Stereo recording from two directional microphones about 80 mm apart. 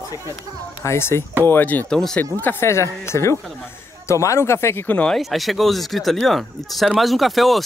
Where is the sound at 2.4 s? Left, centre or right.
Left.